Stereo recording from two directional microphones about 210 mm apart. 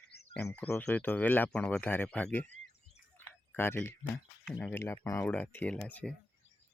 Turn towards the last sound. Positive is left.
turn(degrees=5)  # may be behind; listen again after turning